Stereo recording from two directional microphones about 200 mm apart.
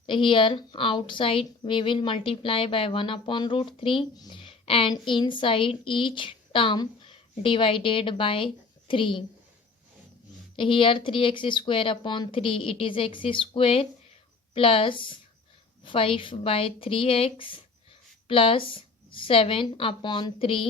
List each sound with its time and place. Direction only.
0.0 s a woman's voice: 25° left (ahead or behind)
10.6 s a woman's voice: 25° left (ahead or behind)